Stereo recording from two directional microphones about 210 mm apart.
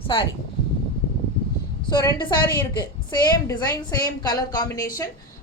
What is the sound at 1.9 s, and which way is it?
A woman's voice, 20° left (ahead or behind).